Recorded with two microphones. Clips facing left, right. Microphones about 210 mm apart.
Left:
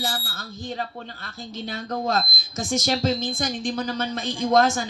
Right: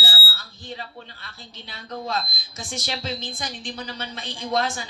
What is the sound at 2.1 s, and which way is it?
Speech, 45° left (ahead or behind).